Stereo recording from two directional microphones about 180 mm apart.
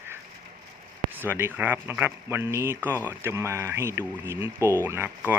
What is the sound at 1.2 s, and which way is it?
Speech, 10° right (ahead or behind).